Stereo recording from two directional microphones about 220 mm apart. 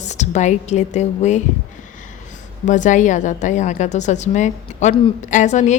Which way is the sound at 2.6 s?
35° left (ahead or behind).